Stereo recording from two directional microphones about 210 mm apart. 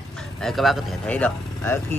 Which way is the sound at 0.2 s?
Centre (ahead or behind).